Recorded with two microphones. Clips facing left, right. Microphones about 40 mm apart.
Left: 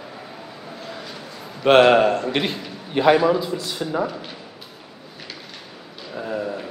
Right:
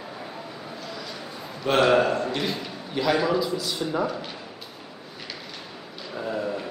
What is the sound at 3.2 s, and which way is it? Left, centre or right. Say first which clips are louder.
Speech: left 4 dB; centre.